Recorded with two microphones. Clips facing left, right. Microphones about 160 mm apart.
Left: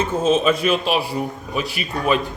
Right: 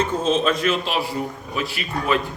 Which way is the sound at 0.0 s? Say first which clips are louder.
Left 2 dB; 10° left (ahead or behind).